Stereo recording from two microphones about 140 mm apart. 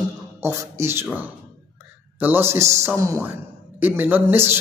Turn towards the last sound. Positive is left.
turn(degrees=-15)  # may be behind; listen again after turning